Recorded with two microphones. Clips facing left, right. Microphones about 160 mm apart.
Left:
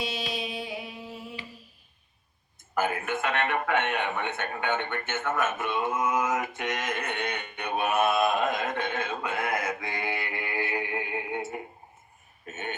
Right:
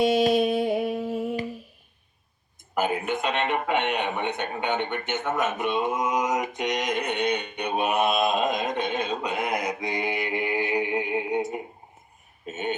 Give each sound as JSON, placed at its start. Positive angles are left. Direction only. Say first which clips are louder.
{"t": 0.0, "sound": "music", "louder": "right 13 dB", "side_deg": -50}
{"t": 2.7, "sound": "a man's voice", "louder": "right 3 dB", "side_deg": -20}
{"t": 12.5, "sound": "a sound", "louder": "right 7 dB", "side_deg": -20}